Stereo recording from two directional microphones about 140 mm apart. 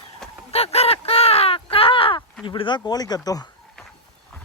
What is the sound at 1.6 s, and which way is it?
Caw, 40° left (ahead or behind).